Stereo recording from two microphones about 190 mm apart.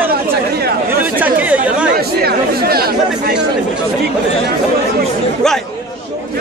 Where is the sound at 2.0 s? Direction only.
55° right (ahead or behind).